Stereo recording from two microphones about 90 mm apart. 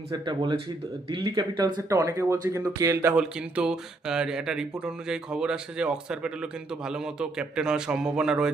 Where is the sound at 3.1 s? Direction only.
10° right (ahead or behind).